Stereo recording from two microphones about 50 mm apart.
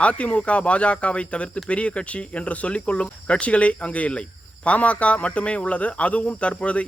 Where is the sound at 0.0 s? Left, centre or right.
Left.